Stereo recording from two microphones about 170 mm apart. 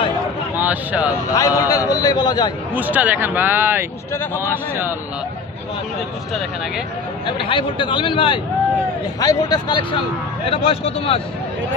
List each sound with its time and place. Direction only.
0.6 s speech: 10° right (ahead or behind)
1.3 s a man's voice: 20° left (ahead or behind)
2.7 s speech: 10° right (ahead or behind)
7.2 s a man's voice: 30° left (ahead or behind)